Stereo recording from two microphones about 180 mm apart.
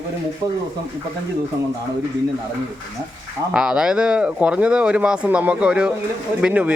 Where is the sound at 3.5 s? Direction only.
5° right (ahead or behind).